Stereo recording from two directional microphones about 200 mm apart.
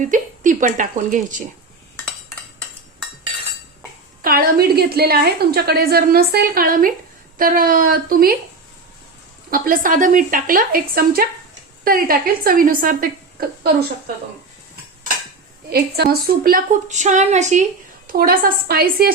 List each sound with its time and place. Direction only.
0.0 s a woman's voice: 40° right (ahead or behind)
4.2 s a woman's voice: 45° right (ahead or behind)
9.5 s a woman's voice: 45° right (ahead or behind)
15.7 s a woman's voice: 50° right (ahead or behind)
18.1 s a woman's voice: 45° right (ahead or behind)